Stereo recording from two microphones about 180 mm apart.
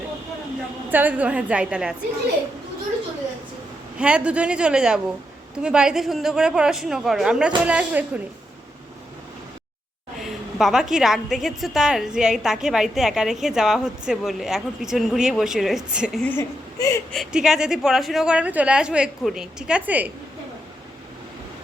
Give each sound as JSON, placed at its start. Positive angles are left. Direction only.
{"t": 0.9, "sound": "a woman's voice", "side_deg": -10}
{"t": 3.9, "sound": "a woman's voice", "side_deg": -5}
{"t": 10.2, "sound": "a woman's voice", "side_deg": 0}
{"t": 16.2, "sound": "speech", "side_deg": 15}
{"t": 17.1, "sound": "a woman's voice", "side_deg": 0}